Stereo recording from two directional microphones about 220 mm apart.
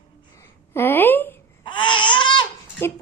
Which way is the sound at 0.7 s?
10° left (ahead or behind).